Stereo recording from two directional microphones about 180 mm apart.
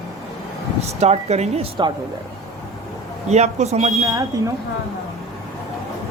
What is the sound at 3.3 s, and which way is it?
Speech, 40° right (ahead or behind).